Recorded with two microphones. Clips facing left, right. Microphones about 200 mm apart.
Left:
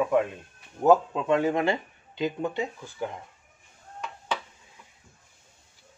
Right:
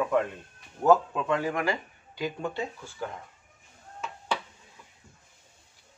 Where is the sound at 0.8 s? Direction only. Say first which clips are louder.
Left 2 dB; 20° left (ahead or behind).